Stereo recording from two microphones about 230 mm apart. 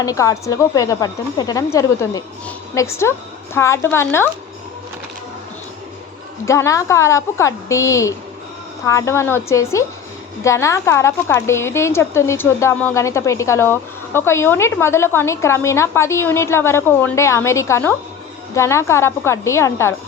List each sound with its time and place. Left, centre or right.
0.0 s a woman's voice: centre
6.4 s a woman's voice: centre